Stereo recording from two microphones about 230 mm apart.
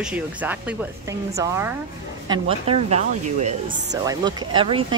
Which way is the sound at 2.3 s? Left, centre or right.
Right.